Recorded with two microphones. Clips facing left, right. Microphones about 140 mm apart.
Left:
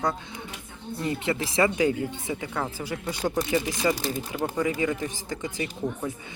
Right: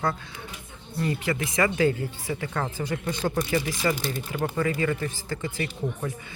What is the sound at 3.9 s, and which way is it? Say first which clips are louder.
Speech: even; 35° left (ahead or behind).